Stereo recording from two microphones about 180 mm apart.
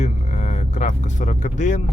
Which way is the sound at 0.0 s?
40° left (ahead or behind).